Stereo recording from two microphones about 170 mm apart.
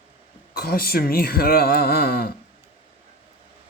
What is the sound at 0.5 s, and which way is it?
Speech, 65° left (ahead or behind).